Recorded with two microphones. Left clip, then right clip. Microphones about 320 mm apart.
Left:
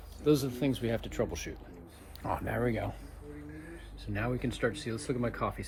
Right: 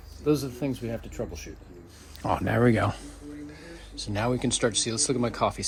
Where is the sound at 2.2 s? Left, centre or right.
Right.